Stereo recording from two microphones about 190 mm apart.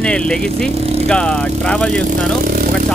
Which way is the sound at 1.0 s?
5° left (ahead or behind).